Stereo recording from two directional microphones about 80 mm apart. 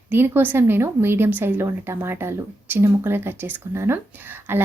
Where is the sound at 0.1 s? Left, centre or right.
Right.